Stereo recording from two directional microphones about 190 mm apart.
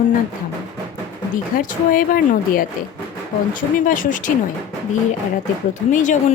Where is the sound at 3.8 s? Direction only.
45° left (ahead or behind).